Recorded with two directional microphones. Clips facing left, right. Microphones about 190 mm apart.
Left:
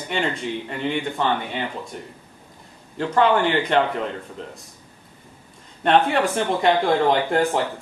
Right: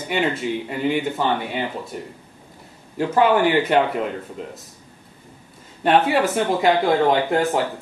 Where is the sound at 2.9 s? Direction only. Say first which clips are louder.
Right 2 dB; 10° right (ahead or behind).